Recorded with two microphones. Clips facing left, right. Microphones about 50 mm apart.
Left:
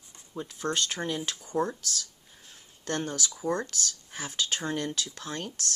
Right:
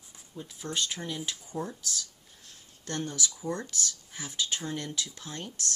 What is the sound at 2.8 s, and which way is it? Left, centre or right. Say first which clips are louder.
Speech: left 2 dB; left.